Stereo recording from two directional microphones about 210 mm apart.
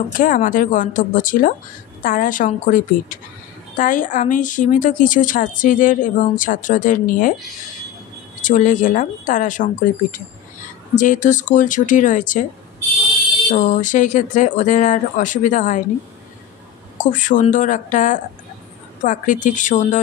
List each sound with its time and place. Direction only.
0.1 s a woman's voice: 40° left (ahead or behind)
8.4 s a woman's voice: 40° left (ahead or behind)
11.0 s a woman's voice: 35° left (ahead or behind)
13.5 s a woman's voice: 35° left (ahead or behind)
17.0 s a woman's voice: 40° left (ahead or behind)